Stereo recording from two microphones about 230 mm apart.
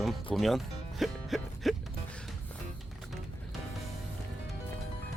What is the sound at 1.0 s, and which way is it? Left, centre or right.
Music, centre.